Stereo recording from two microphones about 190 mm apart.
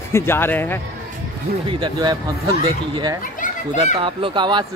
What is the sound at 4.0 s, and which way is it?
Speech, 25° right (ahead or behind).